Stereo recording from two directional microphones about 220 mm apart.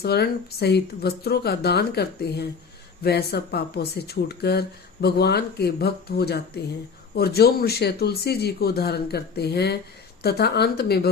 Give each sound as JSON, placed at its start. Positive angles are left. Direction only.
{"t": 0.0, "sound": "speech", "side_deg": 45}